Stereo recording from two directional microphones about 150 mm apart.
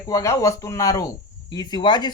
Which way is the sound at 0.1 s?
20° left (ahead or behind).